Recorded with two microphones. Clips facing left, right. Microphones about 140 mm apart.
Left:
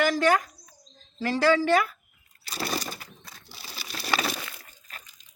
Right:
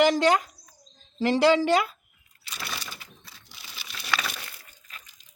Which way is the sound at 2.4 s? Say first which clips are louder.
Left 7 dB; 40° left (ahead or behind).